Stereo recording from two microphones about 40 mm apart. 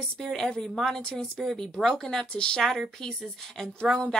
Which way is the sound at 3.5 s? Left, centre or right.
Centre.